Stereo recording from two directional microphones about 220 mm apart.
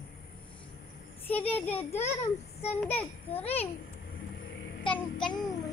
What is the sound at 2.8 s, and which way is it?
Speech, 10° left (ahead or behind).